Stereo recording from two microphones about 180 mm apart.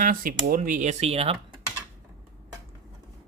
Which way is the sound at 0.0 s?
50° right (ahead or behind).